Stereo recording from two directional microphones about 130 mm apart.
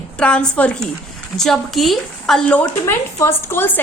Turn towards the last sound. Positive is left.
turn(degrees=15)  # may be behind; listen again after turning